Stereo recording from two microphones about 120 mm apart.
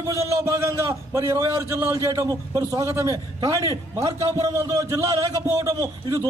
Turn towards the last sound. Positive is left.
turn(degrees=-30)  # may be behind; listen again after turning